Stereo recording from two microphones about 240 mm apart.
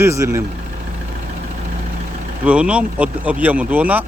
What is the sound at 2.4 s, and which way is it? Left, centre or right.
Speech, centre.